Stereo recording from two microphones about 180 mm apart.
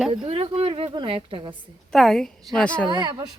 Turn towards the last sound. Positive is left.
turn(degrees=-25)  # may be behind; listen again after turning